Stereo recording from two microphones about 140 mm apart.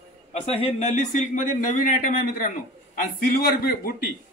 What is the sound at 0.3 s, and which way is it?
Speech, 45° left (ahead or behind).